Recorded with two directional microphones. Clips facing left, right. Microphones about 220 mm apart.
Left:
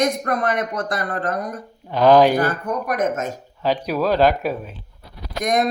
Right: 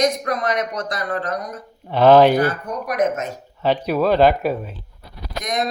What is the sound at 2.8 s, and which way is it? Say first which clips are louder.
Speech: right 3 dB; 50° left (ahead or behind).